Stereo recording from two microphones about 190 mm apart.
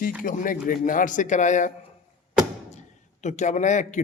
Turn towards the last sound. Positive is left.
turn(degrees=40)  # may be behind; listen again after turning